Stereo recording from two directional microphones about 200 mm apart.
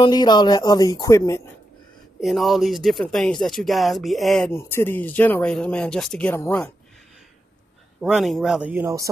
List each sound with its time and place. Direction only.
0.0 s speech: 20° left (ahead or behind)
2.1 s speech: centre (ahead or behind)
4.5 s speech: 10° left (ahead or behind)
8.0 s speech: centre (ahead or behind)